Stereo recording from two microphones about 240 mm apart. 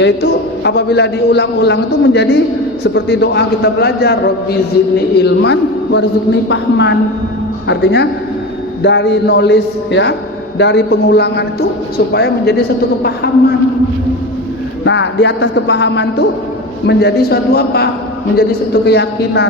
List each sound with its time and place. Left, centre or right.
0.0 s a man's voice: left
14.9 s a man's voice: left